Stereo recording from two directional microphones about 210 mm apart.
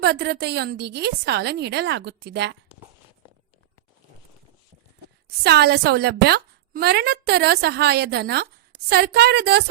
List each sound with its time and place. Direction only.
0.0 s a woman's voice: 50° right (ahead or behind)
5.4 s a woman's voice: 50° right (ahead or behind)